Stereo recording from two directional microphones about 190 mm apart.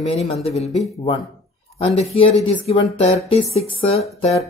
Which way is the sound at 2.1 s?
30° left (ahead or behind).